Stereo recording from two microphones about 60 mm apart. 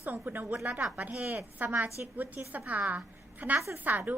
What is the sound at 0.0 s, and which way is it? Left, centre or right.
A woman's voice, right.